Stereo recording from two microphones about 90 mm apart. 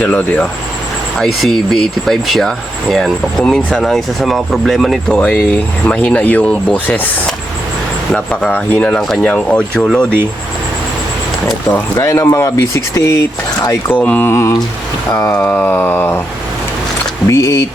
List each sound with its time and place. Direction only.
0.0 s speech: 15° left (ahead or behind)
1.2 s speech: centre (ahead or behind); by 7.1 s 20° left (ahead or behind)
8.1 s speech: 15° left (ahead or behind)
12.0 s speech: 35° left (ahead or behind)
14.0 s speech: 15° left (ahead or behind)
14.3 s speech: 30° left (ahead or behind)
15.4 s a sound: 25° left (ahead or behind)
17.2 s speech: 40° left (ahead or behind)